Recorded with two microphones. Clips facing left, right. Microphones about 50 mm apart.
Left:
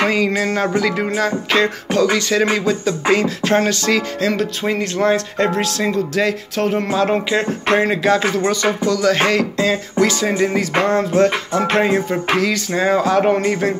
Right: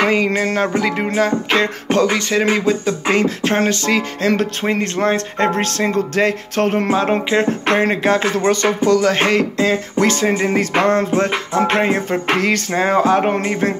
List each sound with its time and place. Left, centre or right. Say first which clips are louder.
0.6 s speech: even; right
1.6 s speech: left 2 dB; right
4.6 s music: left 1 dB; right
6.9 s speech: right 1 dB; right
7.6 s music: even; right
10.0 s music: right 1 dB; right
11.1 s speech: left 2 dB; right
12.1 s music: right 1 dB; right
12.7 s speech: right 1 dB; right